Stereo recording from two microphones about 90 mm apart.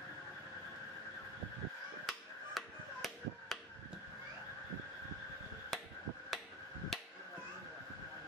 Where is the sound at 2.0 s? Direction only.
Centre (ahead or behind).